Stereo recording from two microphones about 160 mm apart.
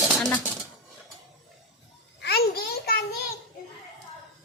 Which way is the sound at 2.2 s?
80° left.